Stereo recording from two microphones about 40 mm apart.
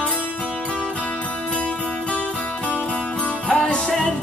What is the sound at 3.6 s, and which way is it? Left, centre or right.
Music, left.